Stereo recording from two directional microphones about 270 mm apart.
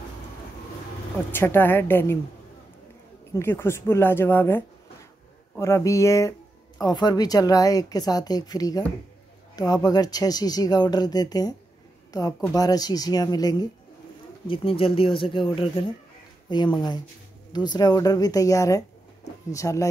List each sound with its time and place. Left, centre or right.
1.3 s speech: centre
3.3 s speech: centre